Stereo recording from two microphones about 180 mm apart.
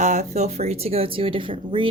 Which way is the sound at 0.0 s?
40° right (ahead or behind).